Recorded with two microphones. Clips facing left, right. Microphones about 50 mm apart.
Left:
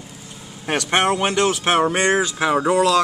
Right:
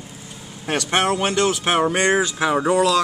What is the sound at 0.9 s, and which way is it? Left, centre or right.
Speech, centre.